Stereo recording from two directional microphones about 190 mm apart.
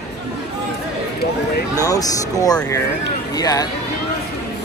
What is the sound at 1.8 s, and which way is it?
Speech, 20° left (ahead or behind).